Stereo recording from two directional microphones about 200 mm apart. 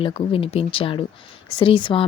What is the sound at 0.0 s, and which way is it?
Speech, 25° left (ahead or behind).